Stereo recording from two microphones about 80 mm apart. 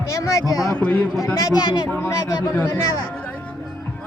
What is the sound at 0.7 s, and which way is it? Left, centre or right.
Speech, centre.